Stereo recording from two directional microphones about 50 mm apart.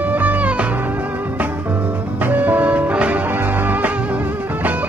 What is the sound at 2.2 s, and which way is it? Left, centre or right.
Music, right.